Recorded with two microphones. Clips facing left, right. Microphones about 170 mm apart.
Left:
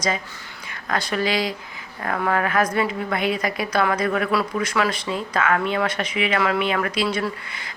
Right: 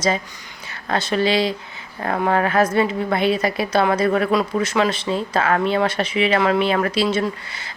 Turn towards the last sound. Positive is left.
turn(degrees=-25)  # may be behind; listen again after turning